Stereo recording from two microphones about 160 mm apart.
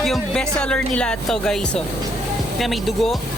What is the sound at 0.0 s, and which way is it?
Speech, 5° left (ahead or behind).